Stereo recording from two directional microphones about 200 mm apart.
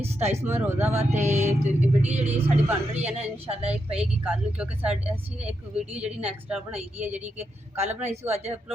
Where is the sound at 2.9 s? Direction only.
30° right (ahead or behind).